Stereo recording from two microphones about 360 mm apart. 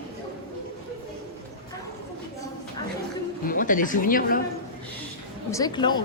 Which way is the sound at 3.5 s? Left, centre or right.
Left.